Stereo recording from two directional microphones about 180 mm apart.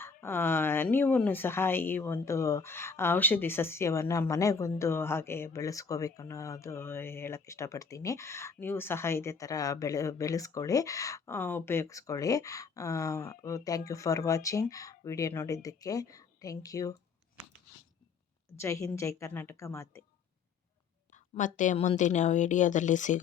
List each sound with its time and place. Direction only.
0.0 s speech: 10° left (ahead or behind)
18.5 s speech: 15° left (ahead or behind)
21.3 s a woman's voice: 45° left (ahead or behind)